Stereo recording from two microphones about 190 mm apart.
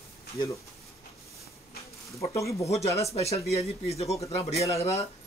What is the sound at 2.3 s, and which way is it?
Speech, 15° left (ahead or behind).